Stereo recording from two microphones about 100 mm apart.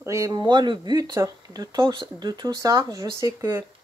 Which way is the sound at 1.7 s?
50° right (ahead or behind).